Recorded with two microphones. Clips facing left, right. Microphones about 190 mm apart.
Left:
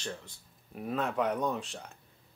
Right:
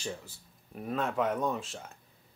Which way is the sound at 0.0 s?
5° right (ahead or behind).